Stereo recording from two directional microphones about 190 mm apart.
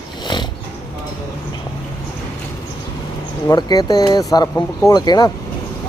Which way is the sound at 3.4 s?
20° left (ahead or behind).